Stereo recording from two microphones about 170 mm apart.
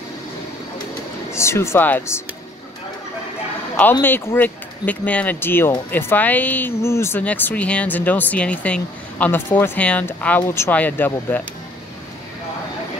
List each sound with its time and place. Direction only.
1.3 s speech: 15° left (ahead or behind)
4.0 s speech: 10° left (ahead or behind)